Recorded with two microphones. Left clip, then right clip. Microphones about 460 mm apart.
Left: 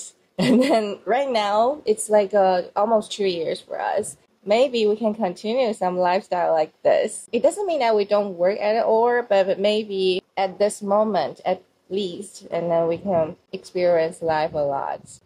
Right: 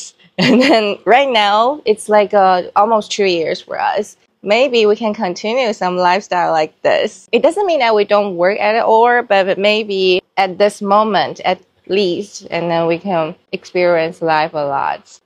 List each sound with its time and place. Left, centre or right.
0.4 s speech: right